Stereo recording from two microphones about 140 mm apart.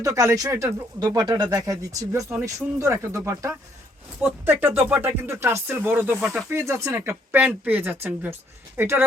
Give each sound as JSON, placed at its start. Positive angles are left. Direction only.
{"t": 0.0, "sound": "speech", "side_deg": -25}
{"t": 6.5, "sound": "speech", "side_deg": -20}